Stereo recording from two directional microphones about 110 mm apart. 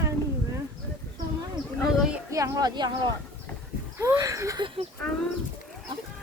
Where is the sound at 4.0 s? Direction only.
25° right (ahead or behind).